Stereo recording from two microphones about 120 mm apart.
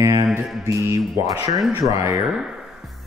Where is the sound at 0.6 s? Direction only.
25° right (ahead or behind).